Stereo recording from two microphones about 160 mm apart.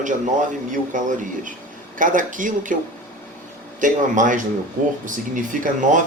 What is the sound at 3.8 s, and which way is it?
Speech, 55° right (ahead or behind).